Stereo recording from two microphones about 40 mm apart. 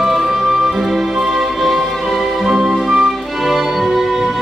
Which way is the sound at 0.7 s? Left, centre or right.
Centre.